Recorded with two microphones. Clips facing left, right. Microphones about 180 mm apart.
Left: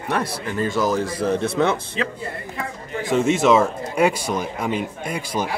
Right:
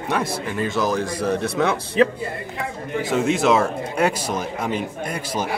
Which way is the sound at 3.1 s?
Centre (ahead or behind).